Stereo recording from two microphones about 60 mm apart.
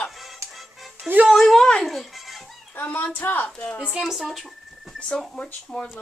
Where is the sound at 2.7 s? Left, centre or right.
Left.